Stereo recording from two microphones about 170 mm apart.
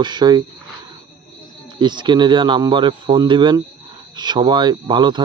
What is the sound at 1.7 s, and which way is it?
Speech, 25° right (ahead or behind).